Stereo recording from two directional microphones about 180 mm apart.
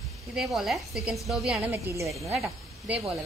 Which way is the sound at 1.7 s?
15° right (ahead or behind).